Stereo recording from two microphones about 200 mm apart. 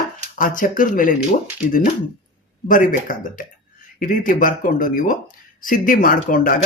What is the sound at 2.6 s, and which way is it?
Speech, 40° left (ahead or behind).